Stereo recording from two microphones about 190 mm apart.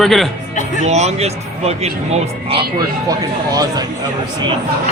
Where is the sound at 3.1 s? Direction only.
20° right (ahead or behind).